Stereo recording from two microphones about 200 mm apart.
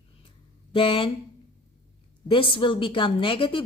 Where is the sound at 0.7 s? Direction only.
25° left (ahead or behind).